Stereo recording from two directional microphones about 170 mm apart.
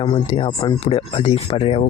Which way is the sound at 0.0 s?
30° left (ahead or behind).